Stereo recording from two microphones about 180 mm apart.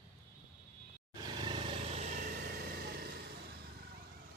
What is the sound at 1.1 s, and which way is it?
Vehicle, 25° right (ahead or behind).